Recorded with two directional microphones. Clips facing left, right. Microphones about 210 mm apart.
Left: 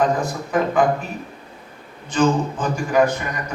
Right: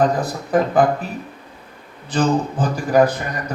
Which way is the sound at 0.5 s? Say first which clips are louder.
Right 3 dB; 35° right (ahead or behind).